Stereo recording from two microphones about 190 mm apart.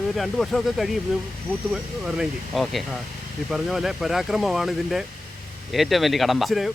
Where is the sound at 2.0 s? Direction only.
Centre (ahead or behind).